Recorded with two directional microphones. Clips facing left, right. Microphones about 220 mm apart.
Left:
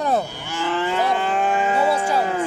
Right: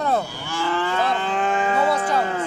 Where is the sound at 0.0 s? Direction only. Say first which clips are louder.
Left 1 dB; 15° left (ahead or behind).